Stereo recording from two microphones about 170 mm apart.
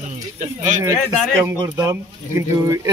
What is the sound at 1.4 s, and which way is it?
Speech, 15° right (ahead or behind).